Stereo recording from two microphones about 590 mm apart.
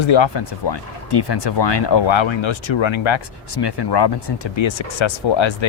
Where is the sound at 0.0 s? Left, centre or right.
Left.